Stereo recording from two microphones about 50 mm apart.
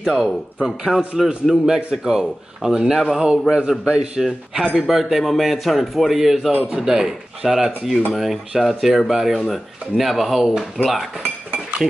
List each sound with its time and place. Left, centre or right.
0.0 s a man's voice: centre
4.7 s a man's voice: centre